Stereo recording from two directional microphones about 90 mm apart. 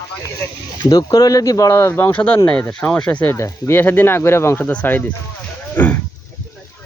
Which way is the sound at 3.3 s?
30° left (ahead or behind).